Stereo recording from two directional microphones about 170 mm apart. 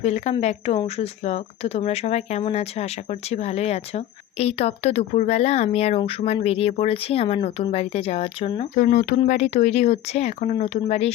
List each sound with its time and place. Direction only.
0.0 s speech: 40° left (ahead or behind)
8.7 s speech: 45° left (ahead or behind)